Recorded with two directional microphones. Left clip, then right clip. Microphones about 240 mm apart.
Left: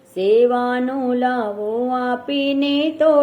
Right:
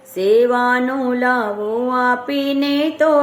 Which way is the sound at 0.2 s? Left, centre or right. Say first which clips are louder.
Right 1 dB; centre.